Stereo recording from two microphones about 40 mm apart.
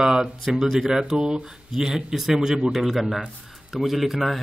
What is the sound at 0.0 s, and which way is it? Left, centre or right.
Speech, centre.